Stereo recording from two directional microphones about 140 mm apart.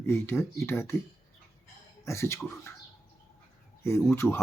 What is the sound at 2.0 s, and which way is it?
Speech, 20° left (ahead or behind).